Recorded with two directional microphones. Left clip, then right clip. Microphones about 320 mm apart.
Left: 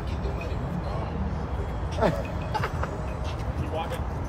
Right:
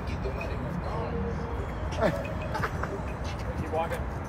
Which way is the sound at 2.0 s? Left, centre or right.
Left.